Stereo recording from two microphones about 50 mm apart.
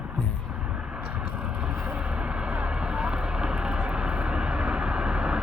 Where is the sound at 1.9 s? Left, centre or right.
Right.